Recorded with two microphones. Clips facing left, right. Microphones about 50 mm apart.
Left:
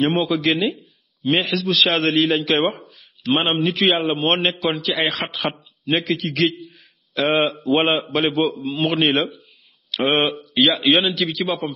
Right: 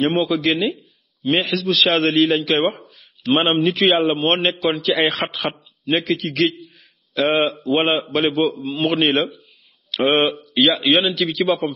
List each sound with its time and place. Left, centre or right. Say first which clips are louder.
0.0 s a man's voice: right 1 dB; centre